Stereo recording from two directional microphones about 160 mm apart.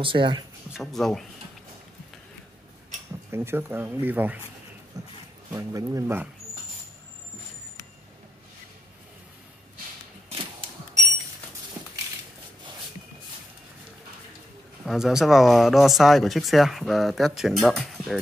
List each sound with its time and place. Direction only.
0.0 s speech: 30° right (ahead or behind)
0.7 s speech: centre (ahead or behind)
3.3 s speech: 15° right (ahead or behind)
4.9 s speech: 20° right (ahead or behind)
14.9 s speech: 5° right (ahead or behind)